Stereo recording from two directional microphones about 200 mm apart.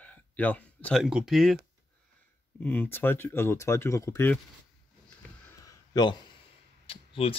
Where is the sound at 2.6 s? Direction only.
10° left (ahead or behind).